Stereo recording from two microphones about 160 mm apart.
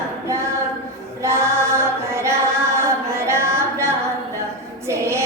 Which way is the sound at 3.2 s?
15° right (ahead or behind).